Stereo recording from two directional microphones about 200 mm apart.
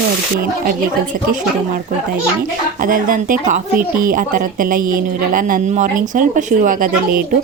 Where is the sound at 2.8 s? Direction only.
45° right (ahead or behind).